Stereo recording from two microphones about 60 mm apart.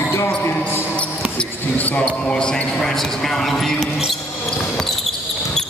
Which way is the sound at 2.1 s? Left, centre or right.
Centre.